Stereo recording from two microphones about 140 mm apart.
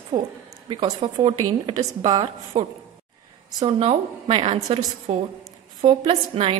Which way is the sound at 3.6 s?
40° right (ahead or behind).